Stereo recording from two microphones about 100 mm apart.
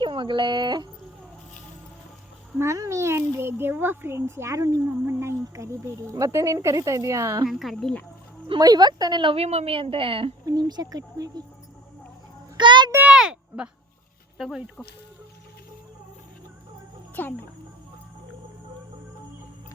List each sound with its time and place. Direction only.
0.0 s speech: 55° right (ahead or behind)
2.6 s a child's voice: 30° right (ahead or behind)
7.4 s speech: centre (ahead or behind)
8.5 s speech: 45° right (ahead or behind)
9.3 s a woman's voice: 90° right; by 10.3 s 60° right (ahead or behind)
10.4 s speech: 45° right (ahead or behind)
12.5 s a sound: 50° right (ahead or behind)
13.1 s a sound: 10° right (ahead or behind)
14.3 s speech: centre (ahead or behind)
17.2 s speech: 20° left (ahead or behind)